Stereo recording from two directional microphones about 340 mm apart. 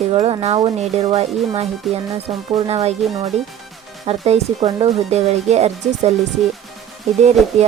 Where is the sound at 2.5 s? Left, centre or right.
Centre.